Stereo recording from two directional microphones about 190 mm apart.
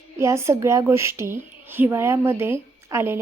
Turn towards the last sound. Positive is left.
turn(degrees=-15)  # may be behind; listen again after turning